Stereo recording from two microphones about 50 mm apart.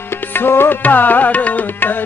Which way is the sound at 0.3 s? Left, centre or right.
Left.